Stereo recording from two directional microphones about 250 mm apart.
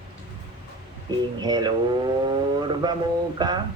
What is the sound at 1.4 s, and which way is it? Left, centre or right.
A man's voice, centre.